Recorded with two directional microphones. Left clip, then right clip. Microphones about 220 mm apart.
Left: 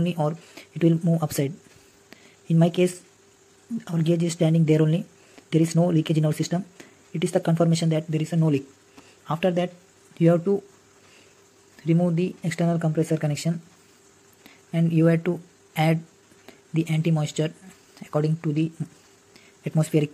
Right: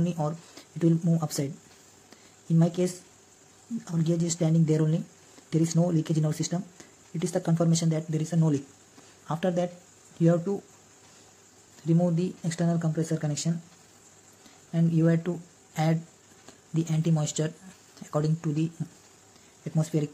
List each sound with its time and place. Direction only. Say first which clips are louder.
0.0 s speech: left 5 dB; 10° left (ahead or behind)
2.6 s speech: left 7 dB; 10° left (ahead or behind)
6.5 s a sound: left 5 dB; 10° left (ahead or behind)
7.3 s speech: left 5 dB; 10° left (ahead or behind)
11.8 s speech: left 3 dB; 5° left (ahead or behind)
14.7 s speech: left 5 dB; 10° left (ahead or behind)
19.6 s speech: left 6 dB; 15° left (ahead or behind)